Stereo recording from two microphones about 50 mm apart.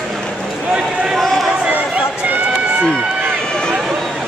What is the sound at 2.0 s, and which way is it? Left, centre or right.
Run, right.